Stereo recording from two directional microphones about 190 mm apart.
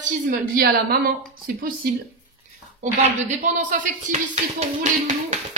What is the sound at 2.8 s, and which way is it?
Speech, 40° right (ahead or behind).